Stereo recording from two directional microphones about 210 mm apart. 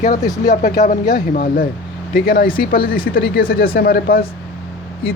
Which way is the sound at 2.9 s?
45° left (ahead or behind).